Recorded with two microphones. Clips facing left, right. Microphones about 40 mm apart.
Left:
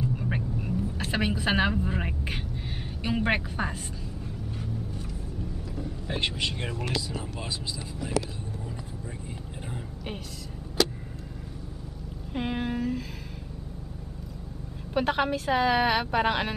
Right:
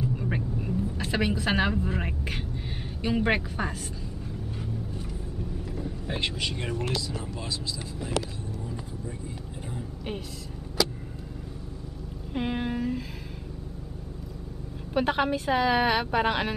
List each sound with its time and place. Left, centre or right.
0.0 s vehicle: centre
3.0 s a woman's voice: centre
6.0 s a woman's voice: centre
12.4 s a sound: centre
15.0 s a woman's voice: centre